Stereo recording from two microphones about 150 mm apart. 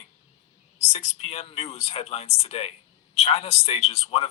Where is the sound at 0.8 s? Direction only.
45° left (ahead or behind).